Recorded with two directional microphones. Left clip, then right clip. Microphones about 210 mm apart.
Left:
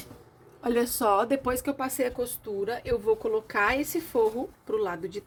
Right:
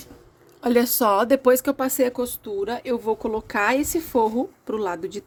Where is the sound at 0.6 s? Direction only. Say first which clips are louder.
Right 6 dB; 55° right (ahead or behind).